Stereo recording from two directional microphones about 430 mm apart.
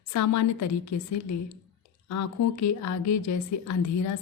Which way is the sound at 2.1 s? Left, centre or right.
Left.